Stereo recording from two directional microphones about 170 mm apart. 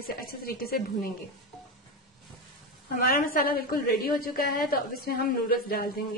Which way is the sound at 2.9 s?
60° left (ahead or behind).